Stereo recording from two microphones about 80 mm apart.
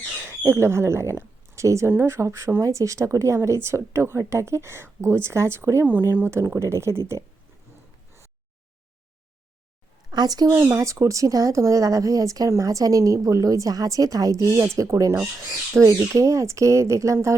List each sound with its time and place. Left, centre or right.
0.1 s a sound: right
0.4 s speech: right
10.1 s speech: right
10.5 s speech: right
15.4 s speech: centre
15.8 s speech: right